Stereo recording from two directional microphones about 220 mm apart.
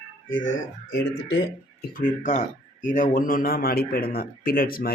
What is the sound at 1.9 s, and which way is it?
Speech, 35° left (ahead or behind).